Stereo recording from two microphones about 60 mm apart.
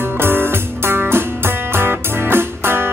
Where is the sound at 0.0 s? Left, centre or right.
Right.